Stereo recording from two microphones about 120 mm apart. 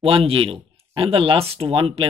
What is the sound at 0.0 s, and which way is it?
Speech, 50° right (ahead or behind).